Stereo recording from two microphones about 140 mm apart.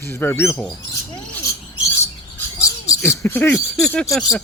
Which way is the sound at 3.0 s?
20° left (ahead or behind).